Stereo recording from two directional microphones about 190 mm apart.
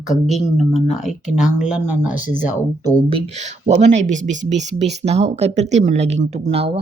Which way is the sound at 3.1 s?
35° right (ahead or behind).